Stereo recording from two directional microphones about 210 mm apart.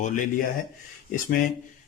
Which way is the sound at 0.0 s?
40° left (ahead or behind).